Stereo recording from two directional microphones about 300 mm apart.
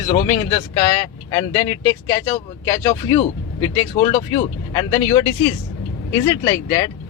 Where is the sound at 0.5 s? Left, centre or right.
Centre.